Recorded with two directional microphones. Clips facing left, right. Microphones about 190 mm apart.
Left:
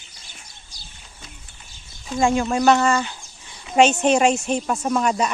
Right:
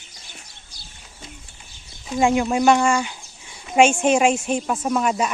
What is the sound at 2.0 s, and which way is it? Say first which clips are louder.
A woman's voice: right 1 dB; 15° right (ahead or behind).